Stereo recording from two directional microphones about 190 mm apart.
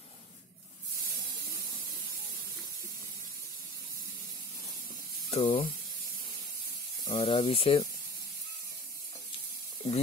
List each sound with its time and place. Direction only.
5.3 s speech: 30° left (ahead or behind)
7.1 s speech: 25° left (ahead or behind)